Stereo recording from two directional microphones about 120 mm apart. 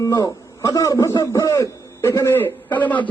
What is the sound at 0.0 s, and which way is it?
Speech, 35° left (ahead or behind).